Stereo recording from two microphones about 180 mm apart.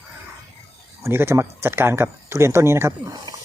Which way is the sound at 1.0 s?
15° right (ahead or behind).